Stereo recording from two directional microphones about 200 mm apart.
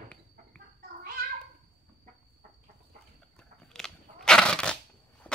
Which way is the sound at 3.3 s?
5° left (ahead or behind).